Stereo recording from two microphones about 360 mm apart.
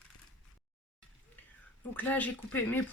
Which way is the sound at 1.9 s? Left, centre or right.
Centre.